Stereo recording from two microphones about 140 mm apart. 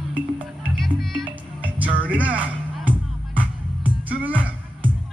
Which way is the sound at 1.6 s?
10° right (ahead or behind).